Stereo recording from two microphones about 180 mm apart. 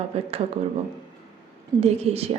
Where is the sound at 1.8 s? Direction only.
35° right (ahead or behind).